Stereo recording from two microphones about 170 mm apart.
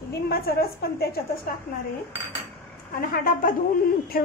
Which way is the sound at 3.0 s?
55° left (ahead or behind).